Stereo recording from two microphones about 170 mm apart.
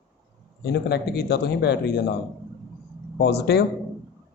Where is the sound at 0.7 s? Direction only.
75° left (ahead or behind).